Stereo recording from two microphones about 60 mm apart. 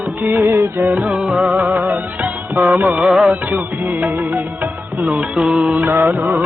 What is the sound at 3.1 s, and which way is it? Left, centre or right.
Music, centre.